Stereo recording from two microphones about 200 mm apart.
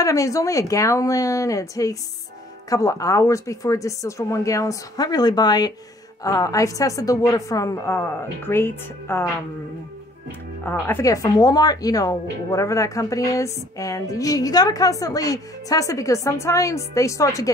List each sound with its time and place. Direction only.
0.0 s speech: 15° left (ahead or behind)
10.6 s speech: 10° left (ahead or behind)